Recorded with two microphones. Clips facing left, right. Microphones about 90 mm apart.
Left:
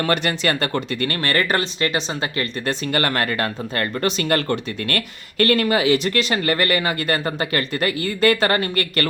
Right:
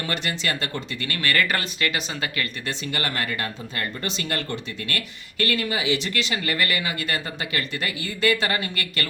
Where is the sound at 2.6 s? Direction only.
50° left (ahead or behind).